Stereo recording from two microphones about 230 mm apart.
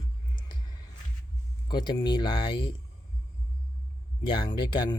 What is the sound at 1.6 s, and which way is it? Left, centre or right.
Speech, centre.